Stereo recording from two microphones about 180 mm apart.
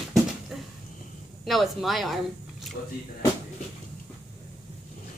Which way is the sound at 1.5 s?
Centre (ahead or behind).